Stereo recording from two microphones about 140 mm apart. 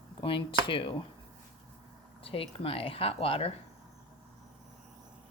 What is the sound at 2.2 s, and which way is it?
A woman's voice, 40° left (ahead or behind).